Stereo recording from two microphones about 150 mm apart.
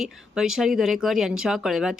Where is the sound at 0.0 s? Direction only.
5° right (ahead or behind).